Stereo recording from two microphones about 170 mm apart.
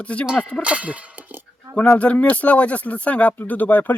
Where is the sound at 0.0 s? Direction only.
5° left (ahead or behind).